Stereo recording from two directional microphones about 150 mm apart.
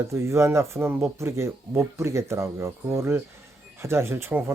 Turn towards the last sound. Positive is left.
turn(degrees=-15)  # may be behind; listen again after turning